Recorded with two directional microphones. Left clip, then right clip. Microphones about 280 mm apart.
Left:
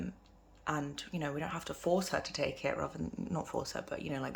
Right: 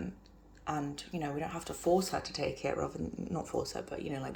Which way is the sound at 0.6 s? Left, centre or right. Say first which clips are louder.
Even; centre.